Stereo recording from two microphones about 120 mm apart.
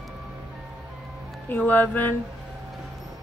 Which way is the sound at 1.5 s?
15° left (ahead or behind).